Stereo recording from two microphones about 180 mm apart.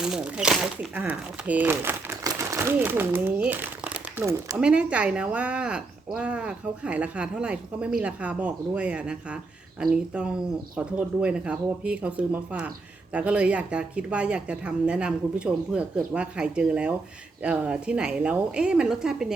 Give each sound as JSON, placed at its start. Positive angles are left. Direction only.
{"t": 0.0, "sound": "a woman's voice", "side_deg": -5}